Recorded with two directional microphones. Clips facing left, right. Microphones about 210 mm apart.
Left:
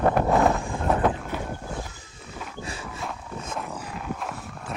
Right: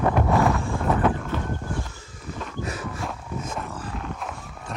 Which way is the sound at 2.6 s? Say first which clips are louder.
Right 6 dB; 30° left (ahead or behind).